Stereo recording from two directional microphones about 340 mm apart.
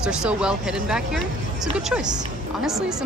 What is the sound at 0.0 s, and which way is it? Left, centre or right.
Speech, centre.